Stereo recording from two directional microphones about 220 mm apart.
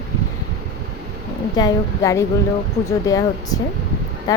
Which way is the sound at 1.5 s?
15° left (ahead or behind).